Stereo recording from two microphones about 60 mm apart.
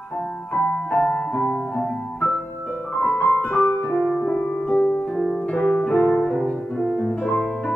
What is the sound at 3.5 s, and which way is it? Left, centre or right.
Piano, left.